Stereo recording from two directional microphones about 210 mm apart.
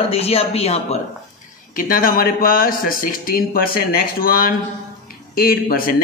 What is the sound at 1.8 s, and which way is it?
A man's voice, 40° left (ahead or behind).